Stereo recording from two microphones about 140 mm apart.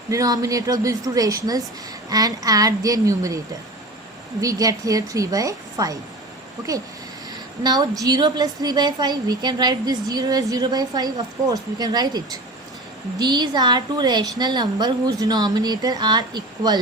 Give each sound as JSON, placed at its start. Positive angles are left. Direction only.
{"t": 0.1, "sound": "a woman's voice", "side_deg": -25}
{"t": 7.6, "sound": "a woman's voice", "side_deg": -30}